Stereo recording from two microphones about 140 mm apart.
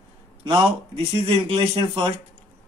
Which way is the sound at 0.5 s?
40° right (ahead or behind).